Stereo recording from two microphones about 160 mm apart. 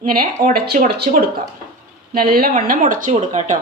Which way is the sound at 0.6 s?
75° right (ahead or behind).